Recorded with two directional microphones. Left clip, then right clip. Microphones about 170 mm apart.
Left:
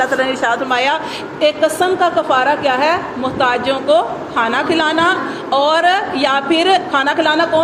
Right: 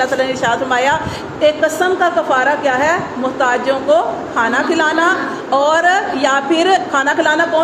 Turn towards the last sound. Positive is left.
turn(degrees=25)  # may be behind; listen again after turning